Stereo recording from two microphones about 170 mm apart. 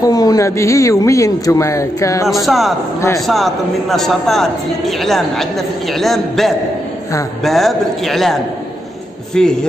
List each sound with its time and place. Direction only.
0.0 s a man's voice: 20° left (ahead or behind)
2.4 s a man's voice: centre (ahead or behind)